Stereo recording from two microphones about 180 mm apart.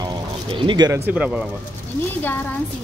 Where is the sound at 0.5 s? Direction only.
25° right (ahead or behind).